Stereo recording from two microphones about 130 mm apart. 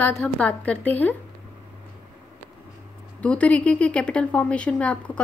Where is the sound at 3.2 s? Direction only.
10° left (ahead or behind).